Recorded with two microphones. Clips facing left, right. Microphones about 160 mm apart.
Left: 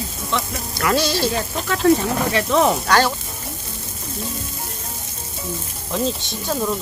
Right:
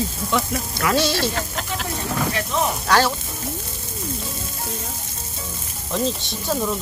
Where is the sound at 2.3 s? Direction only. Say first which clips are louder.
Left 6 dB; 90° left.